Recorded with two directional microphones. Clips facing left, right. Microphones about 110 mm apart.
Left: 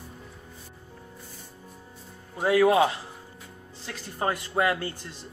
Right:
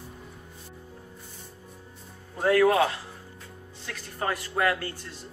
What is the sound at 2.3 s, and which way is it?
Speech, 10° left (ahead or behind).